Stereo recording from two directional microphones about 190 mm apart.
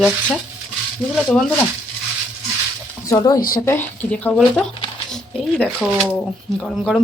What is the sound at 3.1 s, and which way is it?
Speech, 20° left (ahead or behind).